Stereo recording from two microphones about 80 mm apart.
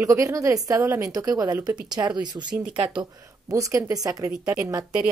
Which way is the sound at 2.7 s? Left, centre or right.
Right.